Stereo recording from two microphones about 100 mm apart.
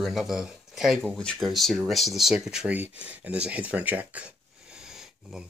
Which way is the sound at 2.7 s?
15° right (ahead or behind).